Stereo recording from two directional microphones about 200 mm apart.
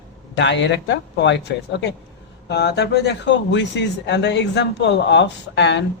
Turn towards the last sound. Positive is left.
turn(degrees=60)  # may be behind; listen again after turning